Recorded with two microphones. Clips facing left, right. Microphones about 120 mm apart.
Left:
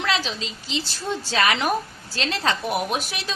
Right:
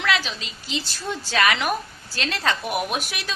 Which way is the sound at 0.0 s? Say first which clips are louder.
Even; 30° left (ahead or behind).